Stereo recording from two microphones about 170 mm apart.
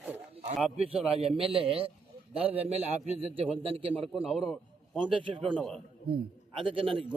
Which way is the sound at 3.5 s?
35° right (ahead or behind).